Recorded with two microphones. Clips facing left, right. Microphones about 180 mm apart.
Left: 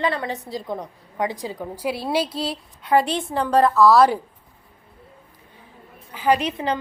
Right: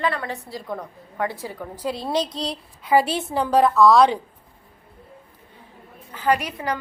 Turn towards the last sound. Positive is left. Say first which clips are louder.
# left 2 dB
turn(degrees=25)  # may be behind; listen again after turning